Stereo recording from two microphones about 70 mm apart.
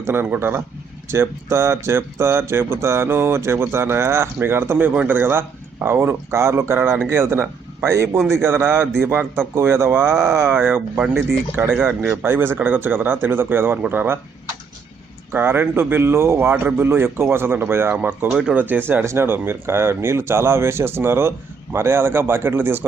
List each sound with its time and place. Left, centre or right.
0.0 s a man's voice: right
12.3 s speech: right
15.3 s speech: right
18.3 s speech: centre
18.5 s speech: right
19.0 s speech: right